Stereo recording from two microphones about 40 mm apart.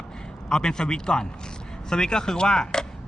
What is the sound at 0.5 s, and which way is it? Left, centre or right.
Speech, centre.